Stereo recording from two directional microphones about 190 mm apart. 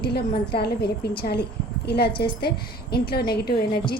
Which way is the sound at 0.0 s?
55° left (ahead or behind).